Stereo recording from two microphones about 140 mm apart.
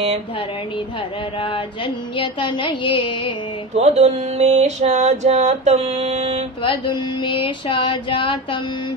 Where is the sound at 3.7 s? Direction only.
50° right (ahead or behind).